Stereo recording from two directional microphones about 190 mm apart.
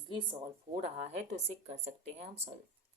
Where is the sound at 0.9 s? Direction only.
35° right (ahead or behind).